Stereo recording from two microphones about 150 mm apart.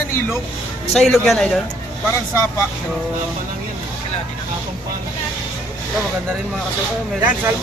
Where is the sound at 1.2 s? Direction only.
Centre (ahead or behind).